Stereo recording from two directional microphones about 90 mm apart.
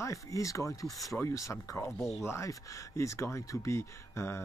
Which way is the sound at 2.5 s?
35° left (ahead or behind).